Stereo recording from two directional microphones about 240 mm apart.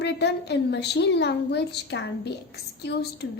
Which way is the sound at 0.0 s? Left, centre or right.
Left.